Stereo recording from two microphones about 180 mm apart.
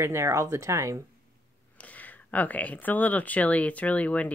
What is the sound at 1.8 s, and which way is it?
Speech, 10° left (ahead or behind).